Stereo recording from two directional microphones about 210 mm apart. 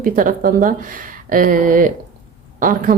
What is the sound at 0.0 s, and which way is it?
Speech, 40° right (ahead or behind).